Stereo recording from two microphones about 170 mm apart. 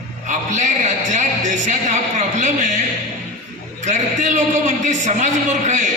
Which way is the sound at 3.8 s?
45° right (ahead or behind).